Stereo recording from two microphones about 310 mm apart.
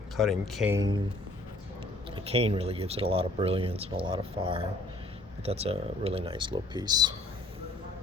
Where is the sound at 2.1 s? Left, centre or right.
Centre.